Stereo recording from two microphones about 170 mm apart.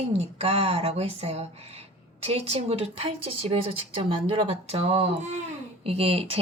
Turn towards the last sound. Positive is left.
turn(degrees=-35)  # may be behind; listen again after turning